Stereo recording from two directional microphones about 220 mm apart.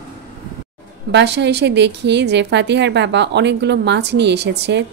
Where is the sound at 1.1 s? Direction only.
50° right (ahead or behind).